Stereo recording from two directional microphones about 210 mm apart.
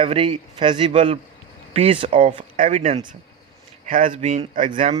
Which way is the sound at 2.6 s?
35° right (ahead or behind).